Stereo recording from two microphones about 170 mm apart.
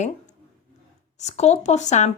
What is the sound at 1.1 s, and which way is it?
Speech, 40° left (ahead or behind).